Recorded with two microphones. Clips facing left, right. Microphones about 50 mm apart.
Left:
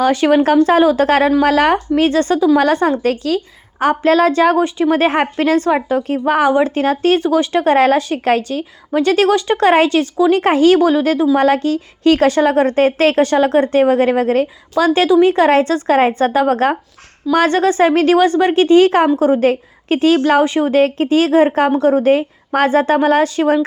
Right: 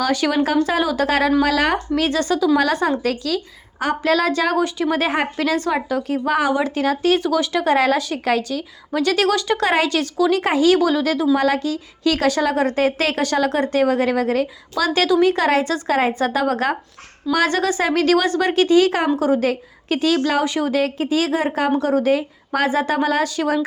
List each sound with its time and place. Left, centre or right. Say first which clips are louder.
0.0 s a woman's voice: left 6 dB; left